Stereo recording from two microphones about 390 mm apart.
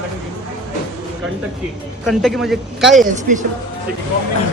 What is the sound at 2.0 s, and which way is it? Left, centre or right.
Speech, centre.